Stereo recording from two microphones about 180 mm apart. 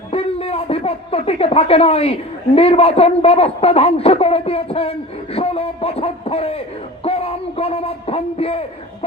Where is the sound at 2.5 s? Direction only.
35° left (ahead or behind).